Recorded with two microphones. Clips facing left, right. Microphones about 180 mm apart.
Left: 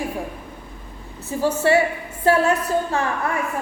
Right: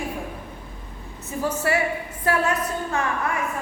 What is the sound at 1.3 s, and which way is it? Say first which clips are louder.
A woman's voice: left 6 dB; 30° left (ahead or behind).